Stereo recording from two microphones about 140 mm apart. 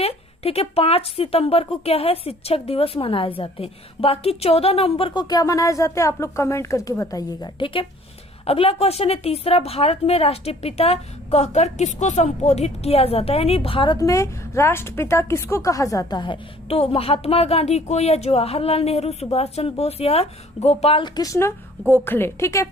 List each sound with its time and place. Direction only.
0.0 s a woman's voice: 45° left (ahead or behind)
5.3 s a woman's voice: 25° left (ahead or behind); by 21.0 s 50° left (ahead or behind)
21.0 s a woman's voice: 25° left (ahead or behind)